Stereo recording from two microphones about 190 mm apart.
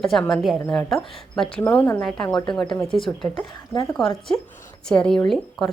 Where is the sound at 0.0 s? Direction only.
Centre (ahead or behind).